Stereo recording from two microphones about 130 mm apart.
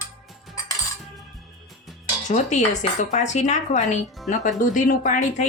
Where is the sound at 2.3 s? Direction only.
70° left (ahead or behind).